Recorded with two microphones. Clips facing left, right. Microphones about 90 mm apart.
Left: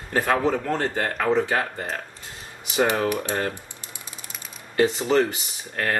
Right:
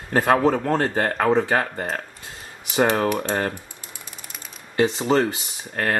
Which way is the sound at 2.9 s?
35° right (ahead or behind).